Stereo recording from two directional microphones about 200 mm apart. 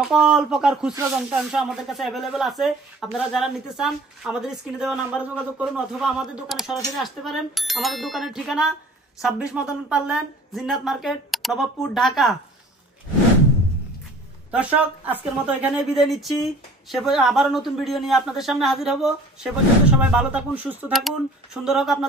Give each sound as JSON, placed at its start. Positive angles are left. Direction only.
{"t": 0.0, "sound": "speech", "side_deg": 0}
{"t": 14.5, "sound": "speech", "side_deg": -5}